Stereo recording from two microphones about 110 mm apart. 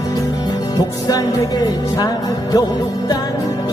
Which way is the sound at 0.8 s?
35° left (ahead or behind).